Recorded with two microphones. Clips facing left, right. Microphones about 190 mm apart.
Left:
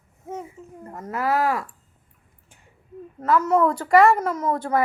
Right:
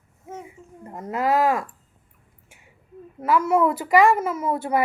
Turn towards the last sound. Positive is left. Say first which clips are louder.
# even
turn(degrees=-10)  # may be behind; listen again after turning